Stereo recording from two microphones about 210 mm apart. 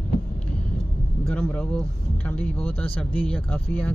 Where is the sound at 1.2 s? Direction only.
10° left (ahead or behind).